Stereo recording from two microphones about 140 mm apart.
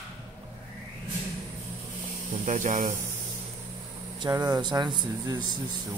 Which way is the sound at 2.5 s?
65° right (ahead or behind).